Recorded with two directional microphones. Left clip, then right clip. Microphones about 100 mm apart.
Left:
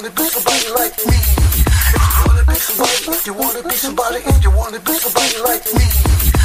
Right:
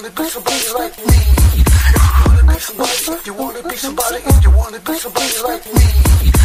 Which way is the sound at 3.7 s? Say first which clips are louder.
Left 1 dB; 35° right (ahead or behind).